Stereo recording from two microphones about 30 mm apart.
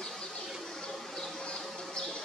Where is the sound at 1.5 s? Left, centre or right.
Left.